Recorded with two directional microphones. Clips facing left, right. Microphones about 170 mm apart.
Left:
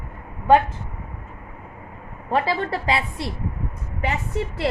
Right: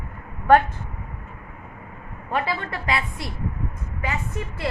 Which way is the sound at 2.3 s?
35° left (ahead or behind).